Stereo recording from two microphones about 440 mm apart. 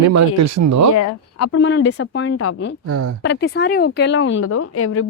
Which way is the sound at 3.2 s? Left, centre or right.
Left.